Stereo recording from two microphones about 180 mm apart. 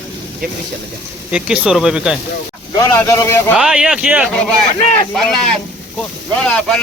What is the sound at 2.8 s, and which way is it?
Speech, 15° left (ahead or behind).